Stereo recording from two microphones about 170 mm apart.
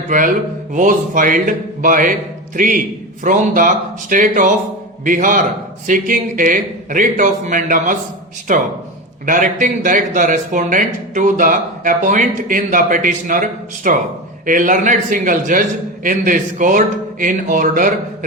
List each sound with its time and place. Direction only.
0.1 s a man's voice: 50° right (ahead or behind)